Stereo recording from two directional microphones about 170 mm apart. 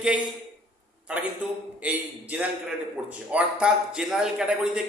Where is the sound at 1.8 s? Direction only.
10° right (ahead or behind).